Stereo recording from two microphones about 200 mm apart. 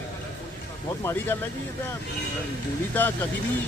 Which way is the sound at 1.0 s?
15° left (ahead or behind).